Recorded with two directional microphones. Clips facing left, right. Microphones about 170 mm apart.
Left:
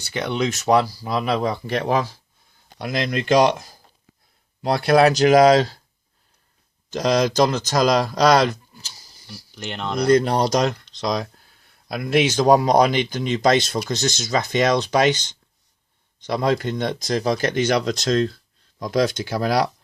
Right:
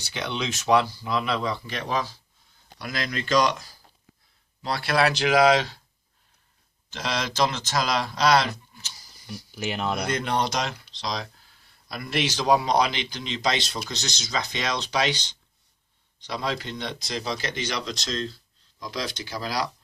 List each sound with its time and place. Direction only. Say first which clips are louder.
0.0 s speech: left 7 dB; 50° left (ahead or behind)
3.2 s speech: left 6 dB; 55° left (ahead or behind); by 5.8 s 40° left (ahead or behind)
6.9 s speech: left 10 dB; 40° left (ahead or behind)
9.2 s speech: right 2 dB; centre (ahead or behind)
10.0 s speech: left 14 dB; 35° left (ahead or behind)
16.2 s speech: left 9 dB; 50° left (ahead or behind)